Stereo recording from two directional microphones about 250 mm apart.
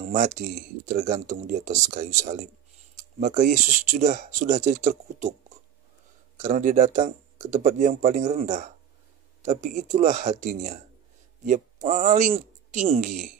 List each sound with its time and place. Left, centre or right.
0.0 s speech: right
6.3 s speech: right